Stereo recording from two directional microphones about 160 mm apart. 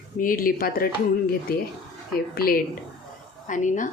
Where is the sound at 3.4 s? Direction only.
50° left (ahead or behind).